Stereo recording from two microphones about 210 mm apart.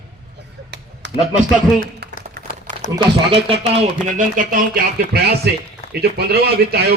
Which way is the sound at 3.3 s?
30° right (ahead or behind).